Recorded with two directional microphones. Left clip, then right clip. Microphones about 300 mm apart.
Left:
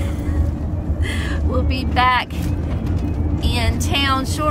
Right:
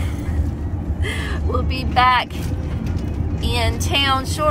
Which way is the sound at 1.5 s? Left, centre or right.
Centre.